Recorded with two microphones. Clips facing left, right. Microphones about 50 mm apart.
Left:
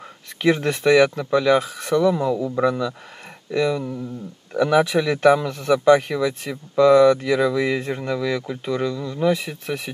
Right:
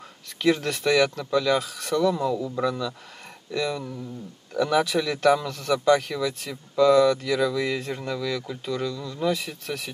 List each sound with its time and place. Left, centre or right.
0.4 s speech: left